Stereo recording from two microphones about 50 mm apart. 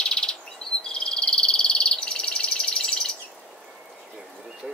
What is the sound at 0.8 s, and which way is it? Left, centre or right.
Frog, centre.